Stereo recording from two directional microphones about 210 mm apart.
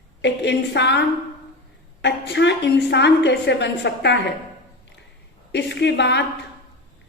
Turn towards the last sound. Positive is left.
turn(degrees=55)  # may be behind; listen again after turning